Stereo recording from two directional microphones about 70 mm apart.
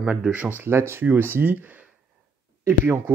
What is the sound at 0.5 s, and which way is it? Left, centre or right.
Speech, right.